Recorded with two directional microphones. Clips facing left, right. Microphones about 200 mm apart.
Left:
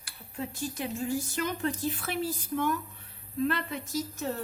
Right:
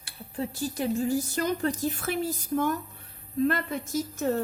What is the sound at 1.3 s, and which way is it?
A woman's voice, 40° right (ahead or behind).